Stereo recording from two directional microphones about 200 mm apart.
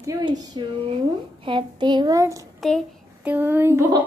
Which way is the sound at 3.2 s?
10° right (ahead or behind).